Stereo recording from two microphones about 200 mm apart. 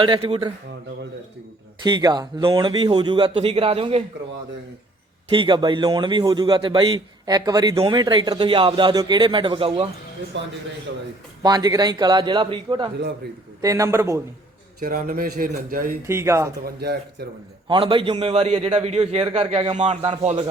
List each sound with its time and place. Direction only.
0.0 s a man's voice: 25° right (ahead or behind)
1.8 s a man's voice: 20° right (ahead or behind)
5.3 s a man's voice: 25° right (ahead or behind)
10.3 s speech: 65° right (ahead or behind)
11.4 s a man's voice: 20° right (ahead or behind)
14.8 s a man's voice: 45° right (ahead or behind)
16.0 s a man's voice: 15° right (ahead or behind)
16.6 s a man's voice: 55° right (ahead or behind)
17.7 s a man's voice: 25° right (ahead or behind)